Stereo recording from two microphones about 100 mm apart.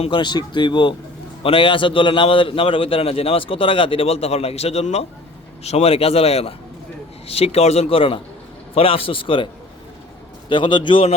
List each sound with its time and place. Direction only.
0.1 s speech: 50° left (ahead or behind)
1.4 s a man's voice: 65° left (ahead or behind)
10.5 s a man's voice: 55° left (ahead or behind)